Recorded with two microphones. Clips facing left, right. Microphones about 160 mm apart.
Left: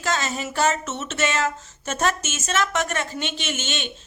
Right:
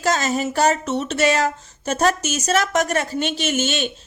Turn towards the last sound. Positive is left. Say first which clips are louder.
# right 8 dB
turn(degrees=-40)  # may be behind; listen again after turning